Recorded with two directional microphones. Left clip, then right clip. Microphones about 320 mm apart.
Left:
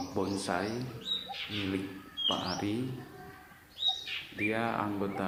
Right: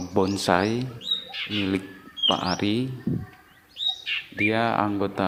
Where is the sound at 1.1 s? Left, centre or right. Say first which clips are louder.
Right 7 dB; right.